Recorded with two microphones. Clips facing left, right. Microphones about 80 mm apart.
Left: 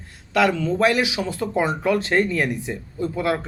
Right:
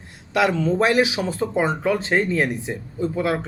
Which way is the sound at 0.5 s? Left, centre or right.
Right.